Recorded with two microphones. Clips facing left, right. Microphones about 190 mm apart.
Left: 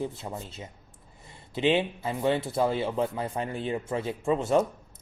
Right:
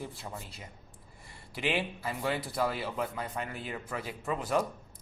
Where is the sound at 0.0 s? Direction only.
25° left (ahead or behind).